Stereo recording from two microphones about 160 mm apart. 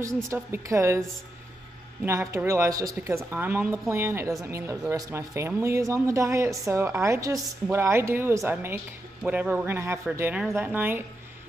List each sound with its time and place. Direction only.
0.3 s speech: 15° right (ahead or behind)
2.0 s speech: 15° right (ahead or behind)